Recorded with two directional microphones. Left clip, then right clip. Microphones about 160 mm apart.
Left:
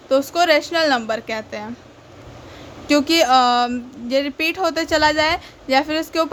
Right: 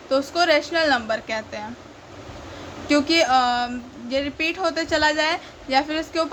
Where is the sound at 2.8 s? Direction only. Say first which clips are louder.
Left 3 dB; 40° left (ahead or behind).